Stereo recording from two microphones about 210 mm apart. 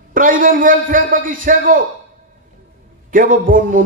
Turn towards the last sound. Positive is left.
turn(degrees=-40)  # may be behind; listen again after turning